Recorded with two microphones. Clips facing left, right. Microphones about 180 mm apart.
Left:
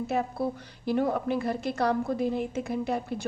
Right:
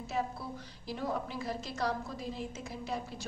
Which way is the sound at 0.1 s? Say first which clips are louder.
Left 6 dB; 65° left (ahead or behind).